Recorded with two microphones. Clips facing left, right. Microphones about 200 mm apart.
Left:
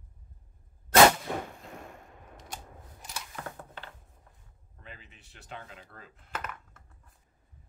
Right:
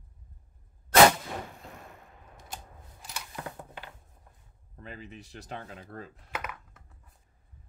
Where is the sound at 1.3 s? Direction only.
60° left (ahead or behind).